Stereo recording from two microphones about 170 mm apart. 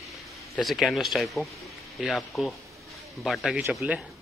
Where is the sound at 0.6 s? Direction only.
Centre (ahead or behind).